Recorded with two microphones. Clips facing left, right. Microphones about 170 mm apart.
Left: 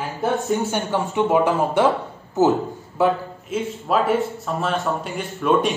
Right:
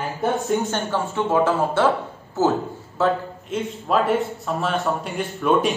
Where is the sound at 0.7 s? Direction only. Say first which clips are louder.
Left 1 dB; 15° left (ahead or behind).